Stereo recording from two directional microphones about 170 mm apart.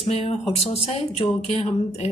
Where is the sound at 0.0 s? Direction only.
35° left (ahead or behind).